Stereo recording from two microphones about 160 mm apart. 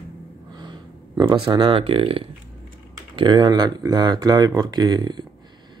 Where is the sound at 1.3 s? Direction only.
30° right (ahead or behind).